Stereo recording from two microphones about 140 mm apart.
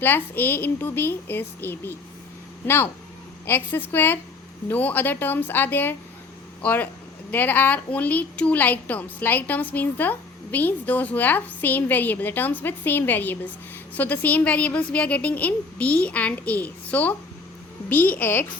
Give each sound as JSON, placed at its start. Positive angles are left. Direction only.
{"t": 0.0, "sound": "speech", "side_deg": 15}